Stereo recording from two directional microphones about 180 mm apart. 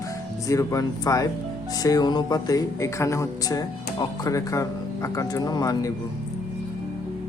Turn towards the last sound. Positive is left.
turn(degrees=20)  # may be behind; listen again after turning